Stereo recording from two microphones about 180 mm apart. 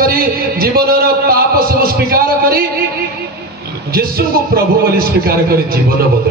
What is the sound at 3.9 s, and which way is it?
A man's voice, 60° right (ahead or behind).